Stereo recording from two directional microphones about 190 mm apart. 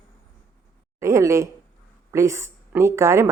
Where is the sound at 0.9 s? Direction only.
15° right (ahead or behind).